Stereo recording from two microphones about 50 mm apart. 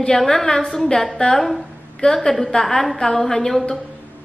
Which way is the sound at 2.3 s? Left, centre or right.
Centre.